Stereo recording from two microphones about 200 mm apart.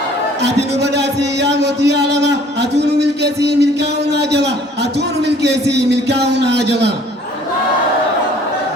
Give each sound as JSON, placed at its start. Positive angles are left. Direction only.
{"t": 0.4, "sound": "a man's voice", "side_deg": -60}